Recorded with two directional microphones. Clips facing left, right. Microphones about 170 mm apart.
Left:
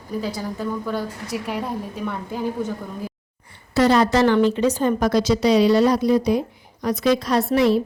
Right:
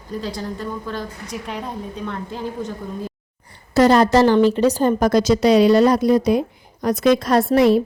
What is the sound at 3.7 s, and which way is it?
A woman's voice, 45° right (ahead or behind).